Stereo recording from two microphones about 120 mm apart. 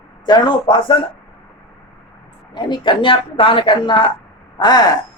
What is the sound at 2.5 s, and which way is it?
A woman's voice, 40° left (ahead or behind).